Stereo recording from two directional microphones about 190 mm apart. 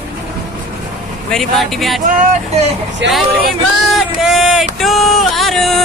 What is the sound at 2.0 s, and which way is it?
Speech, 35° right (ahead or behind).